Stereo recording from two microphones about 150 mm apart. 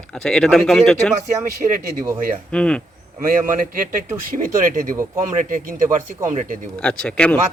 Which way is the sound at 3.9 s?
65° right (ahead or behind).